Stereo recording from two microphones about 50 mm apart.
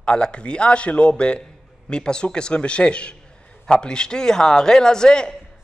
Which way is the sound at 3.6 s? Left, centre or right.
Centre.